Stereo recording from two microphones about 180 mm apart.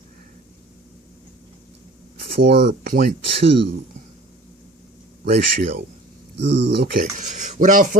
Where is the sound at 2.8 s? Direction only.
55° right (ahead or behind).